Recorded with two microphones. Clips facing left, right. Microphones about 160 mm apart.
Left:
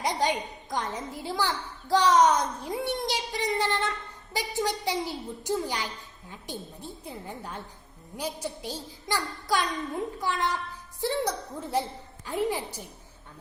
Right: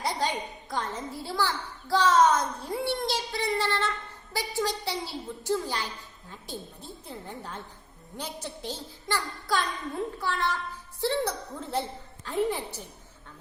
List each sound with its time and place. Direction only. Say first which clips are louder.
0.0 s a woman's voice: left 2 dB; 15° left (ahead or behind)